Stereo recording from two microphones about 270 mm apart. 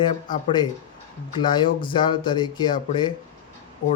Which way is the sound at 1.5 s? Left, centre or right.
Centre.